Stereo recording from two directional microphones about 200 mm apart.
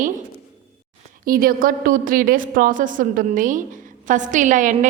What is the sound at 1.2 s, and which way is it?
A woman's voice, 45° right (ahead or behind).